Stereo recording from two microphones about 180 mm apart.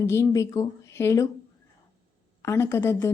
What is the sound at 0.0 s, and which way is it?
A woman's voice, 15° left (ahead or behind).